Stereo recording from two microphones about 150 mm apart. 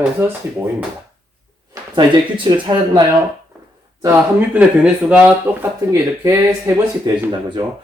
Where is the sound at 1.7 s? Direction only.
30° right (ahead or behind).